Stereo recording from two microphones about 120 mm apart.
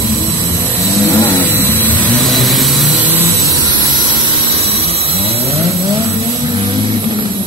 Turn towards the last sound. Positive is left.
turn(degrees=-55)  # may be behind; listen again after turning